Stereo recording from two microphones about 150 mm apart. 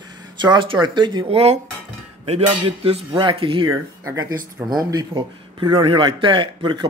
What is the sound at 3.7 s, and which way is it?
Speech, 20° right (ahead or behind).